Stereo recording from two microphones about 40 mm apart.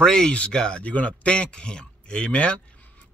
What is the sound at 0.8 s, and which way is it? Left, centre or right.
Speech, left.